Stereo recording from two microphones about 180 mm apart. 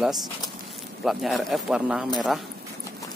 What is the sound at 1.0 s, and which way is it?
A man's voice, centre (ahead or behind).